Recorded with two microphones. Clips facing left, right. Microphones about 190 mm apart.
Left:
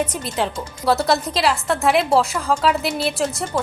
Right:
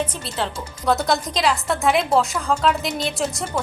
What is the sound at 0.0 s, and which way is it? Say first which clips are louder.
A woman's voice: left 3 dB; 10° left (ahead or behind).